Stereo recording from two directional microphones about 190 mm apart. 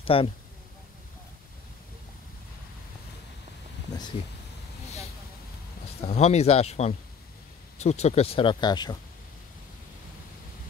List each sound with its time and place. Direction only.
0.0 s speech: 30° left (ahead or behind)
5.9 s speech: 35° left (ahead or behind)